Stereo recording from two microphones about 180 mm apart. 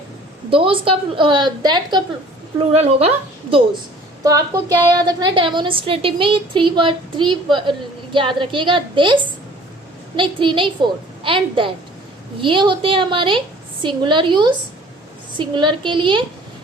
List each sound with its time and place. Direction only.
0.5 s a woman's voice: 30° right (ahead or behind)
2.6 s speech: 35° right (ahead or behind)
4.2 s a woman's voice: 20° right (ahead or behind)
10.2 s a woman's voice: 30° right (ahead or behind)